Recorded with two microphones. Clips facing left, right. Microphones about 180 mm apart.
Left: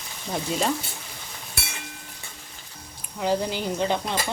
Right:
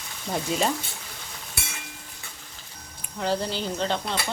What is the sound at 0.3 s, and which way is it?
Speech, centre (ahead or behind).